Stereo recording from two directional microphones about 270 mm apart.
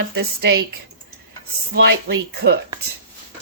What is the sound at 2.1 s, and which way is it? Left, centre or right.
Speech, right.